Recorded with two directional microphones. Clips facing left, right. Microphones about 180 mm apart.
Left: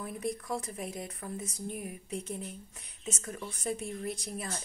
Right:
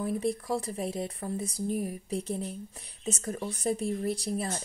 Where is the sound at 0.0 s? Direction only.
30° right (ahead or behind).